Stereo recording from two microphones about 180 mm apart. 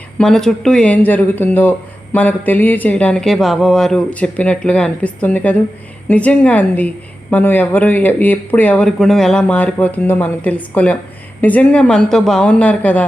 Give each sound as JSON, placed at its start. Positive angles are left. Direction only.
{"t": 0.2, "sound": "a woman's voice", "side_deg": 5}